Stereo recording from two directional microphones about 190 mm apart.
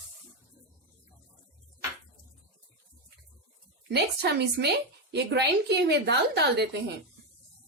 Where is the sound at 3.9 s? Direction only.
60° right (ahead or behind).